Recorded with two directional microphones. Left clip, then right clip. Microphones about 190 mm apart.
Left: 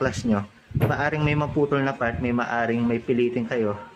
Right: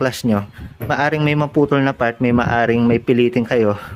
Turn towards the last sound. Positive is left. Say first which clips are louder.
# right 8 dB
turn(degrees=-60)  # may be behind; listen again after turning